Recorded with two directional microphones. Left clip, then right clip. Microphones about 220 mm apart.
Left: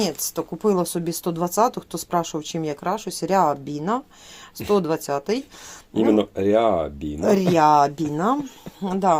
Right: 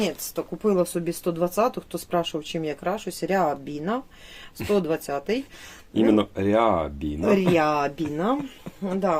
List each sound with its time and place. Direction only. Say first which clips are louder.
0.0 s speech: left 2 dB; 35° left (ahead or behind)
5.9 s speech: left 2 dB; centre (ahead or behind)
7.2 s speech: left 3 dB; 30° left (ahead or behind)